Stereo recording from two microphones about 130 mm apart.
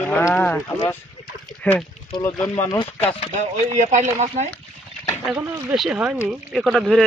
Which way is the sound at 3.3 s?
65° right (ahead or behind).